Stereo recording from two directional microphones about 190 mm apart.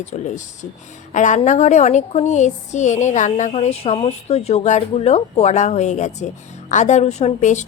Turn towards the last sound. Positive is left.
turn(degrees=40)  # may be behind; listen again after turning